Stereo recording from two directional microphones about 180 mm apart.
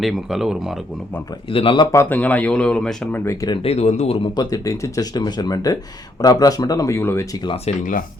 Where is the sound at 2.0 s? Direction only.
10° left (ahead or behind).